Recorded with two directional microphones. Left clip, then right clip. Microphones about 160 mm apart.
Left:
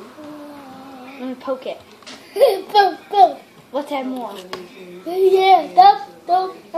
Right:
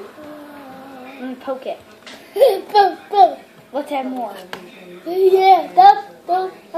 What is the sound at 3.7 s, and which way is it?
Speech, 20° left (ahead or behind).